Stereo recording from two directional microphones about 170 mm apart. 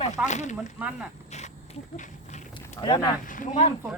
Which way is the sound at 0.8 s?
5° right (ahead or behind).